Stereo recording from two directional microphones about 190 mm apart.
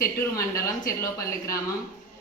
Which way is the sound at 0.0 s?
15° left (ahead or behind).